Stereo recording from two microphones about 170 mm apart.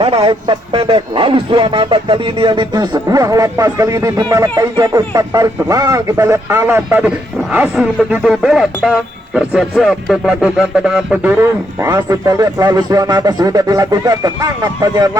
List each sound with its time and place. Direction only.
0.0 s speech: 35° right (ahead or behind)